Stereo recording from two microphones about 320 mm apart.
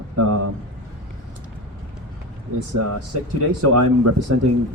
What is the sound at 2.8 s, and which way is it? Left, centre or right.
A man's voice, right.